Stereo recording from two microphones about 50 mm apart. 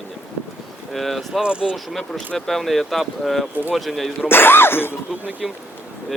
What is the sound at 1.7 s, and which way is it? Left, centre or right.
Speech, centre.